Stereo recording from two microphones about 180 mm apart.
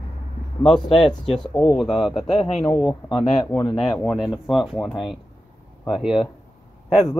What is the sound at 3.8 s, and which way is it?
Speech, centre (ahead or behind).